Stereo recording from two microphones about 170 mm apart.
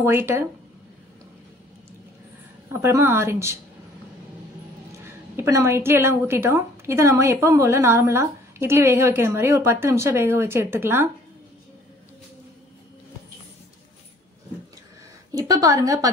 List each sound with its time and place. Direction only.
0.0 s a woman's voice: 15° right (ahead or behind)
2.7 s a woman's voice: 15° right (ahead or behind)
5.0 s a woman's voice: 15° right (ahead or behind)
15.3 s a woman's voice: 20° right (ahead or behind)